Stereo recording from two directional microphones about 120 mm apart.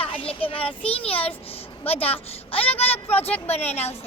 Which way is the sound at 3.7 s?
60° left (ahead or behind).